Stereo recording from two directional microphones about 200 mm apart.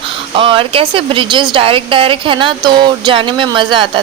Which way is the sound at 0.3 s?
25° right (ahead or behind).